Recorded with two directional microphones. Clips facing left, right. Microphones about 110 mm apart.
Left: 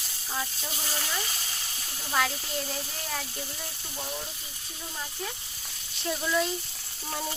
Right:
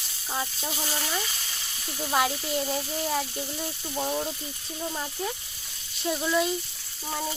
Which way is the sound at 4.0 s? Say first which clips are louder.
Right 9 dB; 35° right (ahead or behind).